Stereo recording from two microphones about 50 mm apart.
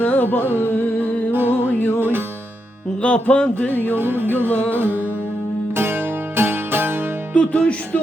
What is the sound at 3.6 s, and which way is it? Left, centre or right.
Music, left.